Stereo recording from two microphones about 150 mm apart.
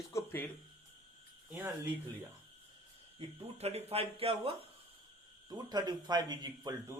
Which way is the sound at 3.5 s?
45° right (ahead or behind).